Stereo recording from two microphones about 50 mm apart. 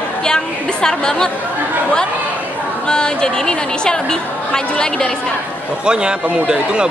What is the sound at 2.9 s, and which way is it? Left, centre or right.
A woman's voice, centre.